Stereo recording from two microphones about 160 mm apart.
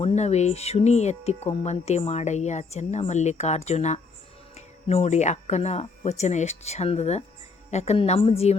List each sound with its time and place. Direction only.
0.0 s a woman's voice: 40° left (ahead or behind)